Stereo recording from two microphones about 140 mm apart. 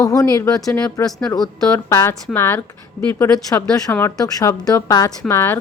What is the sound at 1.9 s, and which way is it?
A woman's voice, 20° left (ahead or behind).